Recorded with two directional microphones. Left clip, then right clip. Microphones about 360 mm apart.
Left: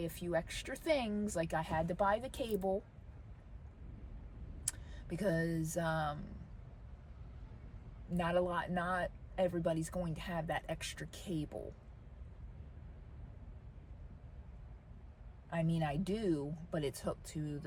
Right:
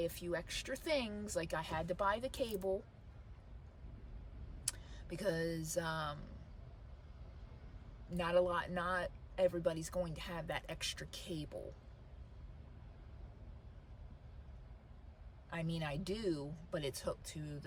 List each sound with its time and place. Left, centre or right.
0.0 s speech: centre
4.6 s speech: centre
8.1 s speech: centre
15.4 s speech: centre